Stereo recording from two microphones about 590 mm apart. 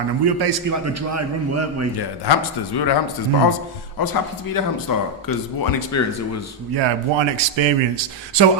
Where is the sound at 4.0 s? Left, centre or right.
Left.